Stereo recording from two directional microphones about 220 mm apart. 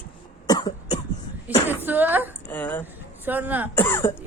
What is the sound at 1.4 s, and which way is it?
Speech, 10° right (ahead or behind).